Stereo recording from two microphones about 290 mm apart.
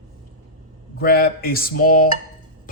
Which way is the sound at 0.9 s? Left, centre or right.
Left.